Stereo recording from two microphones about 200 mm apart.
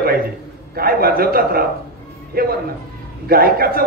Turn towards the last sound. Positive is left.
turn(degrees=-45)  # may be behind; listen again after turning